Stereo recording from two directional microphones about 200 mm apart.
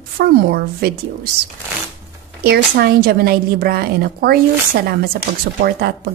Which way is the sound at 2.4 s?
50° right (ahead or behind).